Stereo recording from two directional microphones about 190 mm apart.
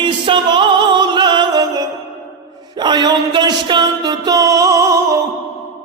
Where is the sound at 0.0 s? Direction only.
25° right (ahead or behind).